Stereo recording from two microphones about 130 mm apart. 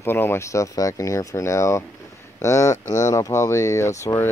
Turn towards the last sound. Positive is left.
turn(degrees=25)  # may be behind; listen again after turning